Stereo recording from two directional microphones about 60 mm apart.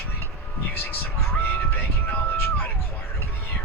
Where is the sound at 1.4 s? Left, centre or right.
Left.